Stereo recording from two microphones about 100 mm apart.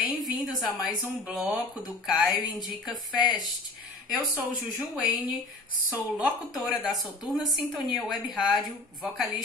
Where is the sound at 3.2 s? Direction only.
50° left (ahead or behind).